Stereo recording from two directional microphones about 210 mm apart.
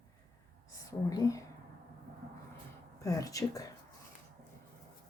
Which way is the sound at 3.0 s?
15° left (ahead or behind).